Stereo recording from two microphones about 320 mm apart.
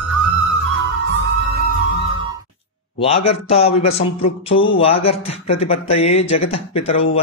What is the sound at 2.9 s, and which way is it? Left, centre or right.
A man's voice, centre.